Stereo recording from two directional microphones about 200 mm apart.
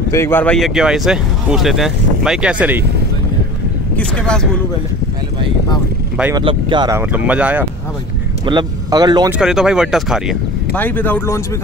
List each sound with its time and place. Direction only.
0.1 s speech: 10° left (ahead or behind); by 2.8 s 5° right (ahead or behind)
3.9 s speech: 5° left (ahead or behind)
6.3 s speech: 20° right (ahead or behind); by 7.6 s 5° right (ahead or behind)
8.5 s speech: 20° right (ahead or behind)
9.4 s speech: 5° right (ahead or behind)
10.8 s speech: 10° left (ahead or behind)